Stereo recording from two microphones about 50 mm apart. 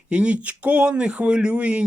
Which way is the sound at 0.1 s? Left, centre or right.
Right.